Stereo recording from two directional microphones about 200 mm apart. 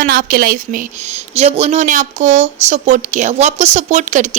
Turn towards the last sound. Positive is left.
turn(degrees=-35)  # may be behind; listen again after turning